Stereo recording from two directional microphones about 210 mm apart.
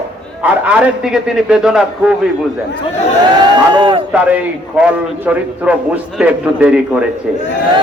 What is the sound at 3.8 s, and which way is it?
Speech, 25° right (ahead or behind).